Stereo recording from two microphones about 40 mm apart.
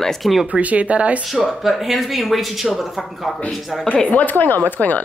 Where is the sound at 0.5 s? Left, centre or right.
Right.